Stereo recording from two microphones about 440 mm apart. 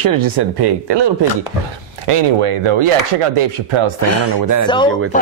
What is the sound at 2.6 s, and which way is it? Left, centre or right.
Speech, right.